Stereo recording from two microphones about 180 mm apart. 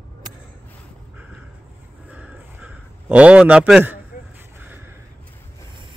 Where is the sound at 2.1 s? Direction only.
5° right (ahead or behind).